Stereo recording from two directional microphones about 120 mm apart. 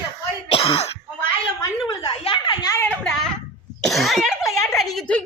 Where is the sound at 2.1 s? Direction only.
50° left (ahead or behind).